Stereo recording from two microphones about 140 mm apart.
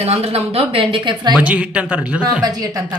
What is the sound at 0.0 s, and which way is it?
Speech, 45° right (ahead or behind).